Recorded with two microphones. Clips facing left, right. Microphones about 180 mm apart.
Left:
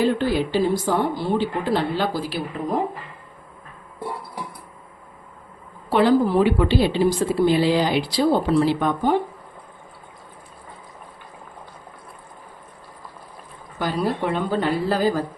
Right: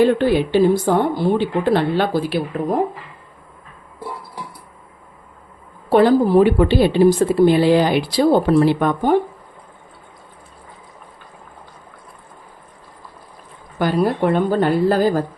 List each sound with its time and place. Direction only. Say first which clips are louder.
0.0 s a woman's voice: right 5 dB; 60° right (ahead or behind)
5.9 s a woman's voice: right 4 dB; 45° right (ahead or behind)
13.7 s a woman's voice: right 6 dB; 55° right (ahead or behind)